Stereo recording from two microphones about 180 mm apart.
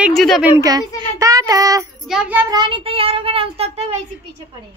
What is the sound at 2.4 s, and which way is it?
Child singing, 25° right (ahead or behind).